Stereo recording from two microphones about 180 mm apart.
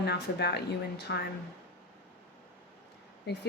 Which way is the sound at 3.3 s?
65° left (ahead or behind).